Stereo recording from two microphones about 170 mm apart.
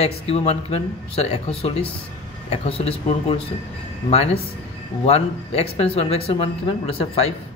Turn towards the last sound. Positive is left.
turn(degrees=35)  # may be behind; listen again after turning